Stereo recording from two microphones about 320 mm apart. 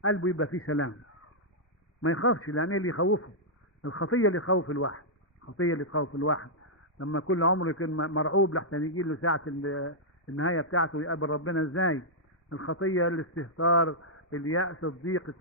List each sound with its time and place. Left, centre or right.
0.0 s a man's voice: left
2.0 s a man's voice: left